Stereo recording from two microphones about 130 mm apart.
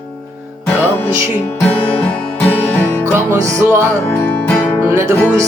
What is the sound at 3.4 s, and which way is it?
Music, 25° right (ahead or behind).